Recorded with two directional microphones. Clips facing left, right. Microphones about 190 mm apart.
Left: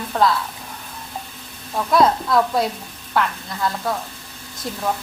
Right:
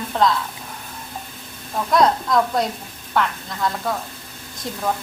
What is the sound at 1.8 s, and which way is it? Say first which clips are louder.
A woman's voice: left 1 dB; 5° left (ahead or behind).